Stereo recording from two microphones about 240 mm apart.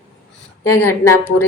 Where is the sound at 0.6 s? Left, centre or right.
Left.